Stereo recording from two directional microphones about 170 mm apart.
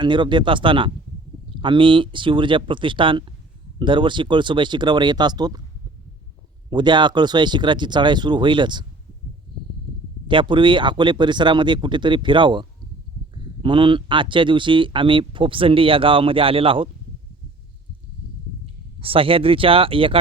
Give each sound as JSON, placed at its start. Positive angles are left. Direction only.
{"t": 0.0, "sound": "speech", "side_deg": -30}
{"t": 6.7, "sound": "speech", "side_deg": -25}
{"t": 10.2, "sound": "speech", "side_deg": -30}
{"t": 18.6, "sound": "speech", "side_deg": -30}